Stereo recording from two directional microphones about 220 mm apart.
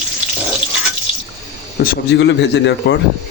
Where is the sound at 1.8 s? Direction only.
50° left (ahead or behind).